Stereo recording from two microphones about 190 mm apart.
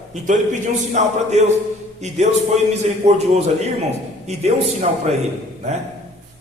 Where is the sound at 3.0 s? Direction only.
30° right (ahead or behind).